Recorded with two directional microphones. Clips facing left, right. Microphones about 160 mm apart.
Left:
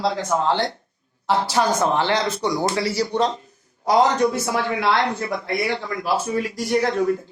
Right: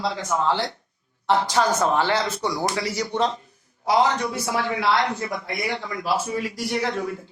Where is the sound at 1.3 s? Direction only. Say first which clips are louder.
Left 1 dB; 10° left (ahead or behind); by 3.2 s 30° left (ahead or behind).